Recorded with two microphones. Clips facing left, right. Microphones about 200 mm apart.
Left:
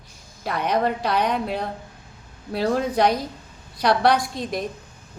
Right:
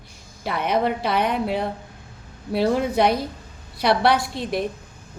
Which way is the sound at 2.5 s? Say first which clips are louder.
Right 2 dB; 10° right (ahead or behind).